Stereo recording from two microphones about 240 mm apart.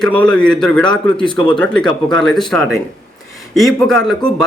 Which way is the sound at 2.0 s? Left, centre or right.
Centre.